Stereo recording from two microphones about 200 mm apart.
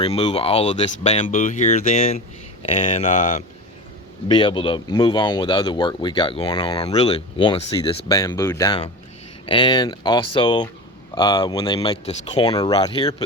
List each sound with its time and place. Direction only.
0.0 s speech: 30° left (ahead or behind)